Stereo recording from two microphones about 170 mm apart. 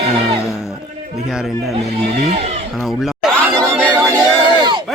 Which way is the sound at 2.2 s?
40° right (ahead or behind).